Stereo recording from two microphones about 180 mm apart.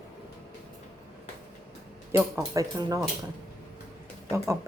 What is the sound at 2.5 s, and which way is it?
Speech, 20° right (ahead or behind).